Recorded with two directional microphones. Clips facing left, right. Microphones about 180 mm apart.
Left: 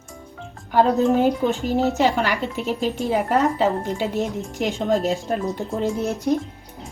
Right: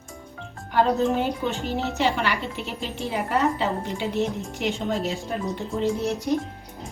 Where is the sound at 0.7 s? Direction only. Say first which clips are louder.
Left 4 dB; 40° left (ahead or behind).